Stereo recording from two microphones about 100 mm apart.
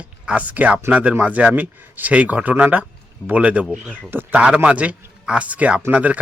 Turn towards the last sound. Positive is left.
turn(degrees=-15)  # may be behind; listen again after turning